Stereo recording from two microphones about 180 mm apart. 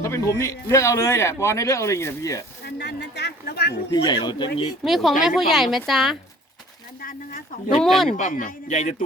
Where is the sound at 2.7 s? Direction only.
70° left (ahead or behind).